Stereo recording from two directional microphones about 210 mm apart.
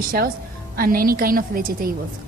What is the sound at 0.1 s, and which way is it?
Speech, 45° right (ahead or behind).